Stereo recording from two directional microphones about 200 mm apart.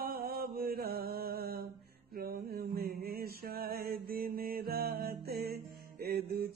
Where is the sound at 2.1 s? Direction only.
50° right (ahead or behind).